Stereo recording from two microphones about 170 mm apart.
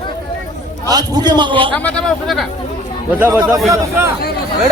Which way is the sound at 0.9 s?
25° right (ahead or behind).